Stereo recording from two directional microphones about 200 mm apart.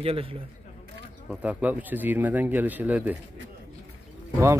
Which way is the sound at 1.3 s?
5° right (ahead or behind).